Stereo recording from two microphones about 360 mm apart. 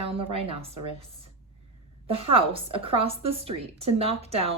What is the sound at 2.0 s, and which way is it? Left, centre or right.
Speech, centre.